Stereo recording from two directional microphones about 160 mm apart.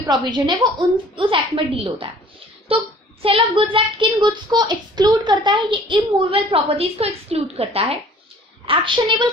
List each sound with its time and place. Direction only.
0.1 s a child's voice: 25° right (ahead or behind)